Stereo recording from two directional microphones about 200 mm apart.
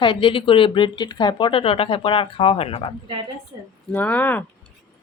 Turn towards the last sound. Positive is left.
turn(degrees=10)  # may be behind; listen again after turning